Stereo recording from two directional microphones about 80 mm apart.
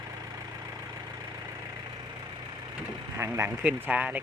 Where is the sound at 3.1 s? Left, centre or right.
Right.